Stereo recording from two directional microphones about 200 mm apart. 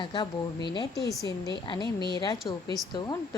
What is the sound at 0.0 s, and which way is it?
A woman's voice, 25° left (ahead or behind).